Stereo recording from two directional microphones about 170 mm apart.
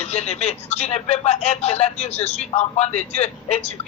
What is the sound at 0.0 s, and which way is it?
A man's voice, 40° left (ahead or behind).